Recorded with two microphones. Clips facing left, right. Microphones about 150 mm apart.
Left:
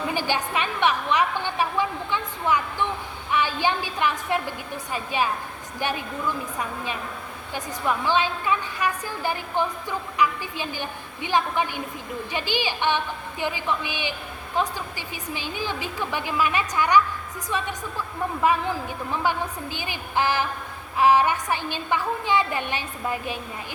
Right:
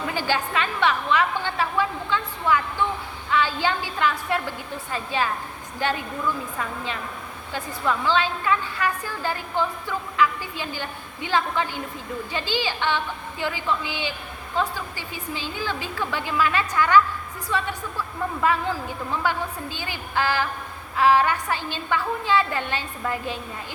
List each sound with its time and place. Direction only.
0.1 s a woman's voice: 15° left (ahead or behind)